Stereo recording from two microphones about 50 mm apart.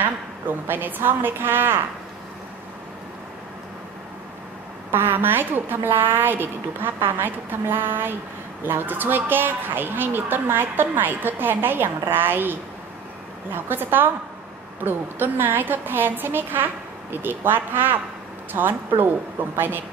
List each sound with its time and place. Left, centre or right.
0.0 s a woman's voice: right
4.9 s a woman's voice: right